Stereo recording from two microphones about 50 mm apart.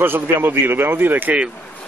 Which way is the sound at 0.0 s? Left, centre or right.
Right.